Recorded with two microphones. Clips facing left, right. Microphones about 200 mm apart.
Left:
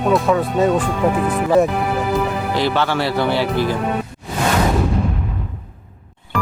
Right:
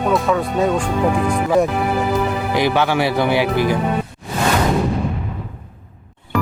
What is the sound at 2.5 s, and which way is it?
Speech, 15° right (ahead or behind).